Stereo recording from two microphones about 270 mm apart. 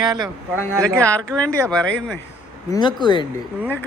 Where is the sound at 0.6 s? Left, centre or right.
Centre.